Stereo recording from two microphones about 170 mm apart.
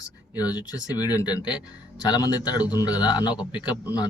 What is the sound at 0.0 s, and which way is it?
Speech, 25° left (ahead or behind).